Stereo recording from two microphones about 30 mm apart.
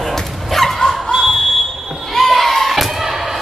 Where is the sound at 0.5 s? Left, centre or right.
Centre.